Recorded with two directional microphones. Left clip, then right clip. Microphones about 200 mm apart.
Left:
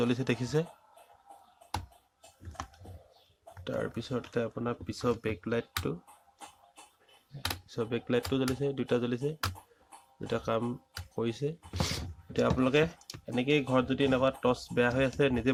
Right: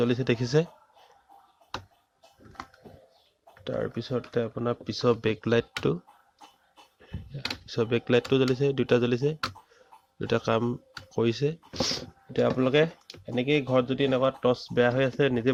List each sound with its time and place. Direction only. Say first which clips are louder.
0.0 s speech: right 5 dB; 20° right (ahead or behind)
3.6 s speech: right 4 dB; 20° right (ahead or behind); by 6.0 s 40° right (ahead or behind)
7.7 s speech: right 8 dB; 30° right (ahead or behind)
11.8 s speech: right 6 dB; 20° right (ahead or behind)